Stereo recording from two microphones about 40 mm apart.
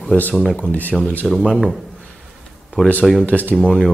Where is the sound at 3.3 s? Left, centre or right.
Left.